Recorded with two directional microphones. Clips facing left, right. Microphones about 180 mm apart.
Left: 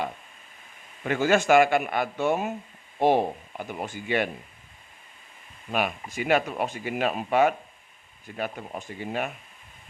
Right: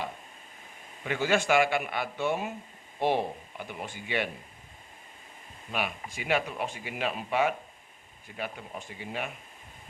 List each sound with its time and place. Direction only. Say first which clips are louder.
1.0 s speech: left 5 dB; 45° left (ahead or behind)
5.7 s speech: left 6 dB; 45° left (ahead or behind)